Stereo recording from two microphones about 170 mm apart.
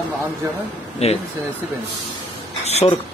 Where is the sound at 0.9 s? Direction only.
35° left (ahead or behind).